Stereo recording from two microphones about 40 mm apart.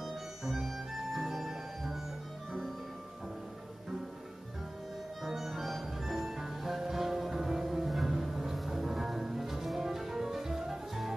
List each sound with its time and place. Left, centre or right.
0.0 s music: centre
5.2 s music: centre